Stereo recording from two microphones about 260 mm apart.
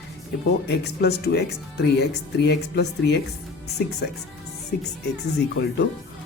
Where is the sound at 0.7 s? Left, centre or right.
Left.